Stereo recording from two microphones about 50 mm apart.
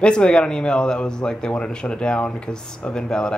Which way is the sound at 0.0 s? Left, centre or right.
Centre.